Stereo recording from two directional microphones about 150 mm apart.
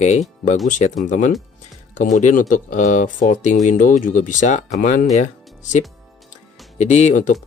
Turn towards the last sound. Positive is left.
turn(degrees=55)  # may be behind; listen again after turning